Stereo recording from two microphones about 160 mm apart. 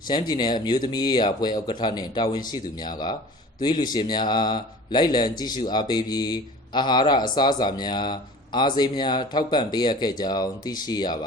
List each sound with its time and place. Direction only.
0.1 s speech: 30° left (ahead or behind)